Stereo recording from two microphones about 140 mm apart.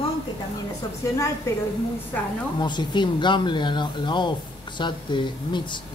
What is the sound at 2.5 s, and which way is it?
A woman's voice, 30° left (ahead or behind).